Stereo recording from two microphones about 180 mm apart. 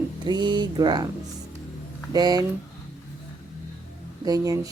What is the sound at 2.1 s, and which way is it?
Speech, 20° right (ahead or behind).